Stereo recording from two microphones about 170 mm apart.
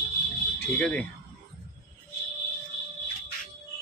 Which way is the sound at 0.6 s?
5° left (ahead or behind).